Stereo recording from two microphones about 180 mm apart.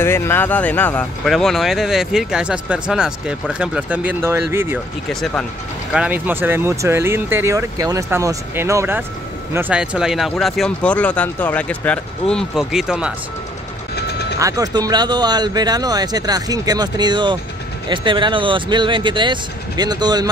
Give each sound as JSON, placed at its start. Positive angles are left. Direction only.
{"t": 0.0, "sound": "speech", "side_deg": 15}
{"t": 5.9, "sound": "speech", "side_deg": -10}
{"t": 14.4, "sound": "speech", "side_deg": -20}